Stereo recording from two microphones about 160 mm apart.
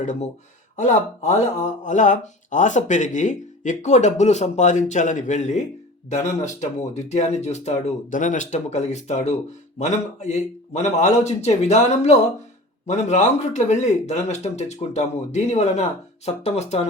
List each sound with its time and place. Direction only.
0.0 s speech: 50° left (ahead or behind)